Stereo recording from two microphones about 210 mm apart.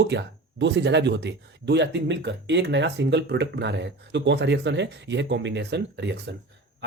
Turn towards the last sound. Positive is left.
turn(degrees=-55)  # may be behind; listen again after turning